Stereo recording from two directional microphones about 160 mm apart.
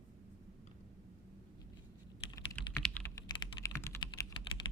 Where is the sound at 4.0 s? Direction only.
30° left (ahead or behind).